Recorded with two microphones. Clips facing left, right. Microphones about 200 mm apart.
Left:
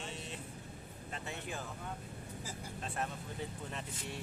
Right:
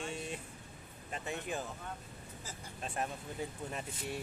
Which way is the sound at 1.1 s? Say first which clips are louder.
Right 4 dB; 15° right (ahead or behind).